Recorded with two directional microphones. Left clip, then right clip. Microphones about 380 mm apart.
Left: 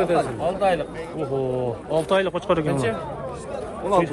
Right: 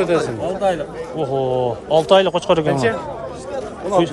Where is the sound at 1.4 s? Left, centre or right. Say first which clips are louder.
Right 6 dB; centre.